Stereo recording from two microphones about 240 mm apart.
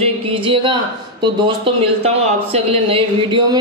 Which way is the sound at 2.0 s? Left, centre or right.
Right.